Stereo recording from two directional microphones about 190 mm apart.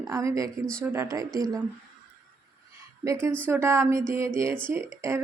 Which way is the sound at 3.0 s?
15° right (ahead or behind).